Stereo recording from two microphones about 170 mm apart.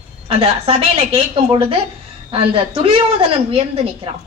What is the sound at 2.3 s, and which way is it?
Speech, 35° right (ahead or behind).